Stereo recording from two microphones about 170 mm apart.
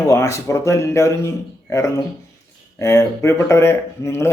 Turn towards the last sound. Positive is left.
turn(degrees=15)  # may be behind; listen again after turning